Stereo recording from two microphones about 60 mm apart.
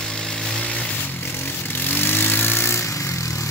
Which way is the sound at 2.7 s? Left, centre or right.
Left.